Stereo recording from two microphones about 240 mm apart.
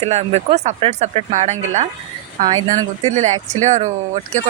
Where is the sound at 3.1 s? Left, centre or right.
Right.